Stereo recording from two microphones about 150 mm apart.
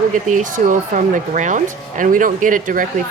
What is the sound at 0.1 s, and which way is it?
Speech, 60° right (ahead or behind).